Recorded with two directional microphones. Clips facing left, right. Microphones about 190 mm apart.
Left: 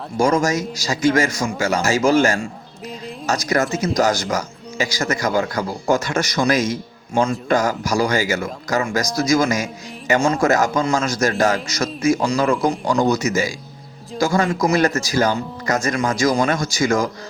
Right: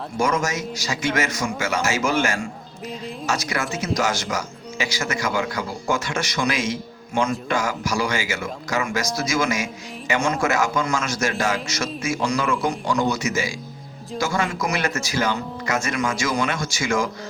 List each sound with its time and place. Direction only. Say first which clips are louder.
0.2 s speech: left 5 dB; 35° left (ahead or behind)